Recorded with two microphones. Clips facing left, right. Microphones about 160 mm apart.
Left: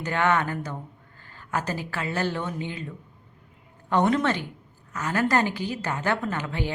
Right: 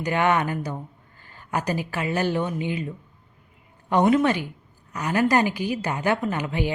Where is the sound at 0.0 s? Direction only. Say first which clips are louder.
Right 2 dB; 15° right (ahead or behind).